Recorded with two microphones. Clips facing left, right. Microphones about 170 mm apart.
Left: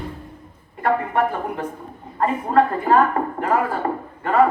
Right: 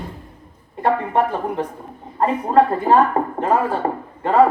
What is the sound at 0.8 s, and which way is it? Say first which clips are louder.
A woman's voice: right 2 dB; 25° right (ahead or behind).